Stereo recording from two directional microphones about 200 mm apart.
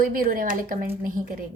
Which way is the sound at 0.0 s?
45° right (ahead or behind).